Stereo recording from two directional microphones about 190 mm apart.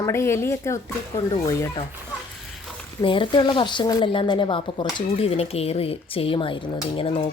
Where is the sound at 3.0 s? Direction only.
25° left (ahead or behind).